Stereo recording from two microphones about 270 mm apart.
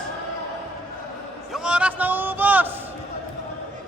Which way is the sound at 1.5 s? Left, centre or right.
Centre.